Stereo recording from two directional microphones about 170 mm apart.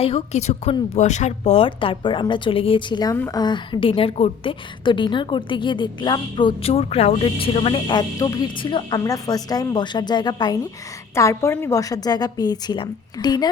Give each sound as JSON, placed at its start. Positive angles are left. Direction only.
{"t": 0.0, "sound": "a woman's voice", "side_deg": 35}